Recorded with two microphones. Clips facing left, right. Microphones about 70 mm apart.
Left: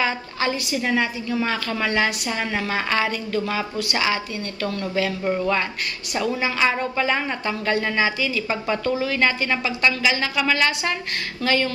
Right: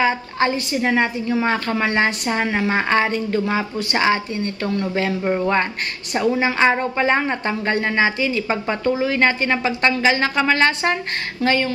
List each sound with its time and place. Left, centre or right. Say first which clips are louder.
0.0 s a woman's voice: right 5 dB; right
11.4 s a woman's voice: right 2 dB; right